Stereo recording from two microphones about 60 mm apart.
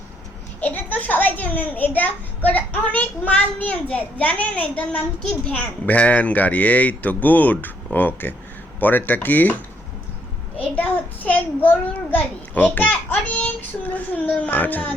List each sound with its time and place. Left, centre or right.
0.6 s a child's voice: left
5.2 s a child's voice: centre
5.8 s a child's voice: left
10.8 s a child's voice: left